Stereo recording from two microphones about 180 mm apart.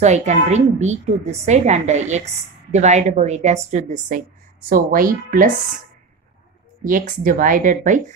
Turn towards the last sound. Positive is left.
turn(degrees=-45)  # may be behind; listen again after turning